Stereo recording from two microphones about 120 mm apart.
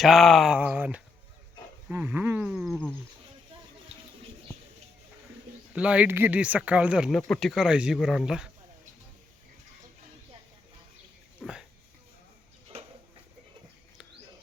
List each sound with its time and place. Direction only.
0.0 s speech: centre (ahead or behind)
0.6 s speech: 15° right (ahead or behind)
5.7 s speech: 10° right (ahead or behind)
7.2 s speech: 5° left (ahead or behind)
11.4 s speech: centre (ahead or behind)